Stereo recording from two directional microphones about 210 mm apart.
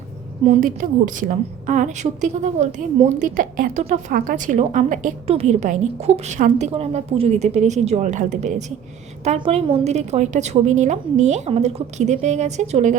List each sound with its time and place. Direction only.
0.4 s a woman's voice: 35° right (ahead or behind)